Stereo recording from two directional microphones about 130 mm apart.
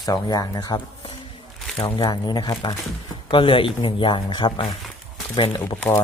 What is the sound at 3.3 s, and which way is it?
Speech, 40° left (ahead or behind).